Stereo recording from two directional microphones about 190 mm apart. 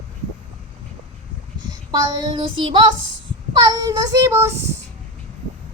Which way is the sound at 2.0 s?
25° right (ahead or behind).